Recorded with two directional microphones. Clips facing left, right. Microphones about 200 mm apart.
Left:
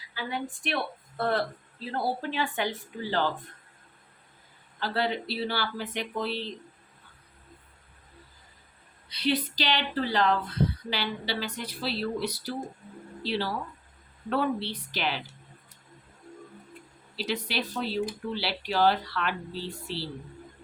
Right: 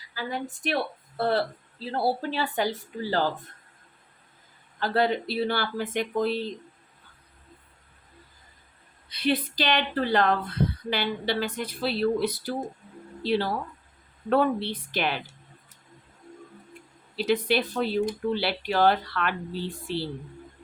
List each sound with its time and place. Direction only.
0.1 s a sound: 40° right (ahead or behind)
0.6 s a woman's voice: 35° right (ahead or behind)
4.8 s speech: 50° right (ahead or behind)
9.0 s speech: 50° right (ahead or behind)
17.2 s speech: 50° right (ahead or behind)